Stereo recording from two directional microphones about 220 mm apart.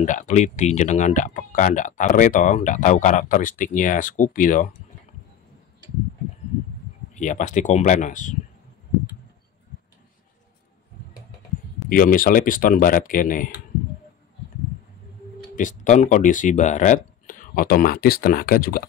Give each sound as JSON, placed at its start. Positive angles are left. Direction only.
{"t": 0.0, "sound": "speech", "side_deg": 35}
{"t": 7.2, "sound": "speech", "side_deg": 35}
{"t": 11.9, "sound": "speech", "side_deg": 40}
{"t": 15.5, "sound": "speech", "side_deg": 35}